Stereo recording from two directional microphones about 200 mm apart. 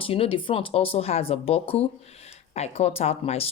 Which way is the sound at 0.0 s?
30° left (ahead or behind).